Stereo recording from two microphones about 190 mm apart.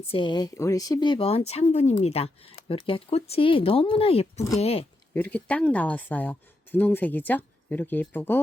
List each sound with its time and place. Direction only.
0.1 s speech: 25° left (ahead or behind)
5.1 s speech: 10° left (ahead or behind)